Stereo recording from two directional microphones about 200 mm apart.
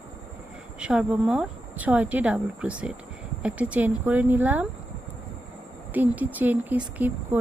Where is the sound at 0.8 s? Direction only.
5° right (ahead or behind).